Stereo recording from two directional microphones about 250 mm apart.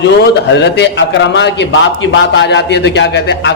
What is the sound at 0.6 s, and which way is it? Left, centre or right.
A man's voice, left.